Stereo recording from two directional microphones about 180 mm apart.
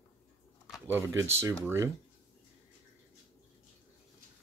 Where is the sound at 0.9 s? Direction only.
15° right (ahead or behind).